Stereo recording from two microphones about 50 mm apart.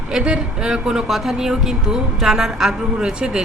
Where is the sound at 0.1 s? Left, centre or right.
Centre.